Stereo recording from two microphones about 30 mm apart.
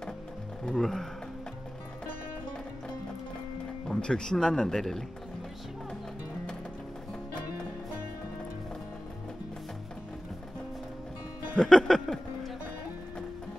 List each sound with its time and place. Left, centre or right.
0.7 s speech: centre
4.0 s speech: left
11.5 s speech: left